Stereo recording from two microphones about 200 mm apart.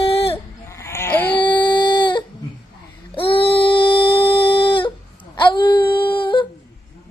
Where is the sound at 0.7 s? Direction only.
15° left (ahead or behind).